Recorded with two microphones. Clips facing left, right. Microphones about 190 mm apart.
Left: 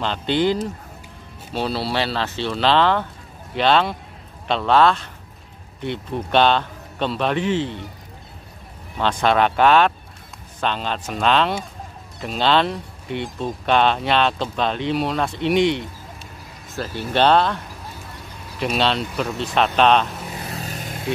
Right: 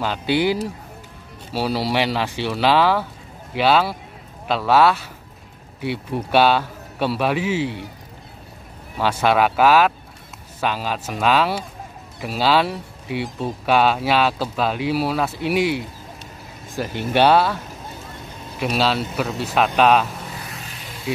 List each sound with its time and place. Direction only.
0.0 s a man's voice: 10° right (ahead or behind)
8.9 s a man's voice: 5° right (ahead or behind)
18.6 s speech: 5° right (ahead or behind)
20.3 s vehicle: 40° left (ahead or behind)